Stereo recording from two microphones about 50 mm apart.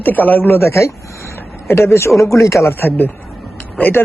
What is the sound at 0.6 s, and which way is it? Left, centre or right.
Speech, left.